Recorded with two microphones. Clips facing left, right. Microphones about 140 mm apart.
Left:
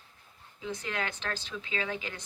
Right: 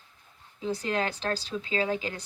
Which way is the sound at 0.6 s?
35° right (ahead or behind).